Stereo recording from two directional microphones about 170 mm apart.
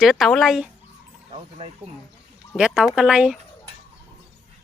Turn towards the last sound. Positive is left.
turn(degrees=-5)  # may be behind; listen again after turning